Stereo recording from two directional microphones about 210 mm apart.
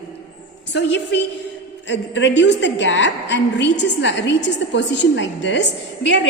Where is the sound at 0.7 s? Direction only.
60° left (ahead or behind).